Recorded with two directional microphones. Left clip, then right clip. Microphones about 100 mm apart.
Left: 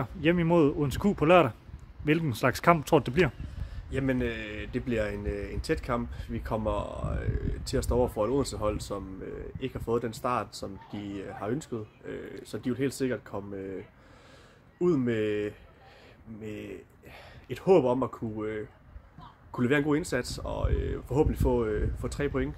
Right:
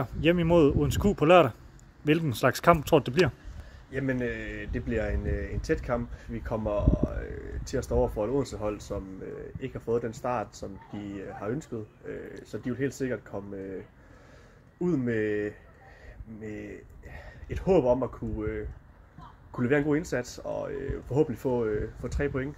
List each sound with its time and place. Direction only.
0.0 s speech: 10° left (ahead or behind); by 22.5 s 35° left (ahead or behind)